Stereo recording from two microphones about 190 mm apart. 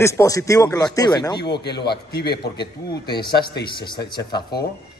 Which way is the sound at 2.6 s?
25° left (ahead or behind).